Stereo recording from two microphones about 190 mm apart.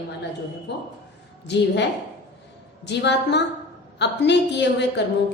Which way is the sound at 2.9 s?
65° left (ahead or behind).